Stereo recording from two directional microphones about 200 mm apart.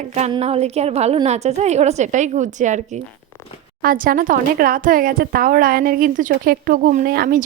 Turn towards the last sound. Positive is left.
turn(degrees=-50)  # may be behind; listen again after turning